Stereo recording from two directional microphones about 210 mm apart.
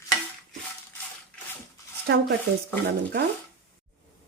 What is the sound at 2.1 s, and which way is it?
Speech, 50° right (ahead or behind).